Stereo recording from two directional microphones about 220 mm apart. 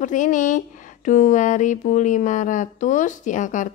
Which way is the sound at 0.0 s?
35° left (ahead or behind).